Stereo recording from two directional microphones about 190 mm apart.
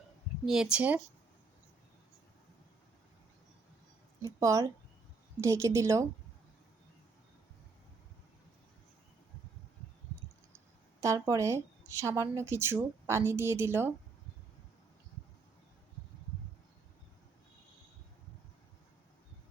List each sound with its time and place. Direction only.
0.4 s speech: 5° right (ahead or behind)
4.2 s speech: 15° right (ahead or behind)
11.0 s speech: 15° right (ahead or behind)